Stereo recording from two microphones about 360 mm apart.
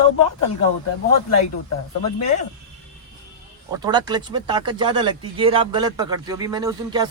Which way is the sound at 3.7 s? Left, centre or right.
Centre.